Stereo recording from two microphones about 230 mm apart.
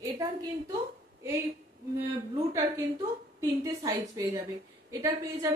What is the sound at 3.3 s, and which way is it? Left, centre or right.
A woman's voice, centre.